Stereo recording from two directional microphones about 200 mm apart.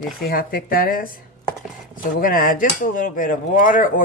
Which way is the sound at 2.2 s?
45° left (ahead or behind).